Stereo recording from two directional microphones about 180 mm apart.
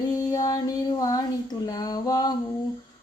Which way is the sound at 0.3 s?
20° left (ahead or behind).